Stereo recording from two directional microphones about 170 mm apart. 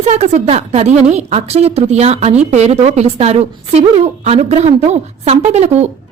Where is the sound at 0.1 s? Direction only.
40° right (ahead or behind).